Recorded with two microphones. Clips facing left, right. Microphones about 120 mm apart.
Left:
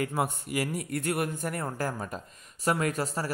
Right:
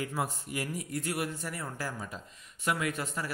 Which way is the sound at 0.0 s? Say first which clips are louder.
Left 4 dB; 60° left (ahead or behind).